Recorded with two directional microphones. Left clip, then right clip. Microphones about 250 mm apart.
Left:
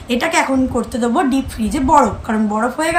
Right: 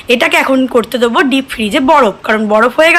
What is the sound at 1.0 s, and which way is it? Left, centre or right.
A woman's voice, centre.